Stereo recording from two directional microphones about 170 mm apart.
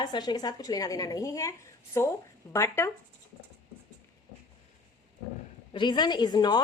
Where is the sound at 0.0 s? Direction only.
25° left (ahead or behind).